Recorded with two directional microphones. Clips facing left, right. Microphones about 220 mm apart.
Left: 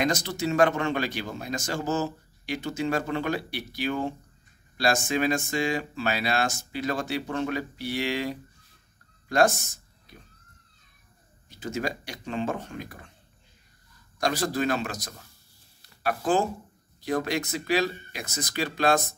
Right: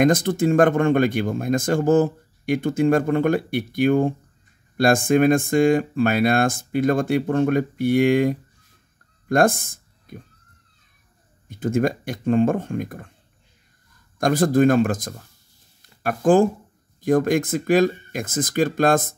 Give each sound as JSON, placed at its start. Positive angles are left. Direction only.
{"t": 0.0, "sound": "speech", "side_deg": -50}
{"t": 11.4, "sound": "speech", "side_deg": -50}
{"t": 14.1, "sound": "speech", "side_deg": -50}
{"t": 15.8, "sound": "a sound", "side_deg": -50}
{"t": 17.0, "sound": "speech", "side_deg": -50}